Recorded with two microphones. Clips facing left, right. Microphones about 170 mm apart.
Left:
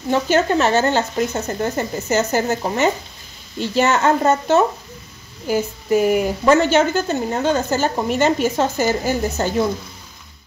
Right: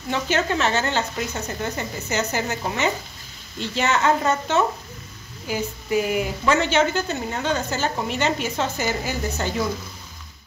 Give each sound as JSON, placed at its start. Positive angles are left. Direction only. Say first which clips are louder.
{"t": 0.1, "sound": "a woman's voice", "louder": "left 6 dB", "side_deg": 45}